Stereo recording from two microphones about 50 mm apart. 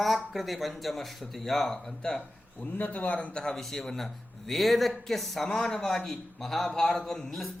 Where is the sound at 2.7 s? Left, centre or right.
Left.